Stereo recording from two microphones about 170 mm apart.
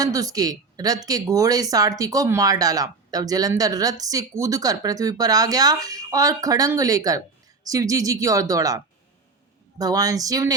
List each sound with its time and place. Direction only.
0.0 s speech: 20° right (ahead or behind)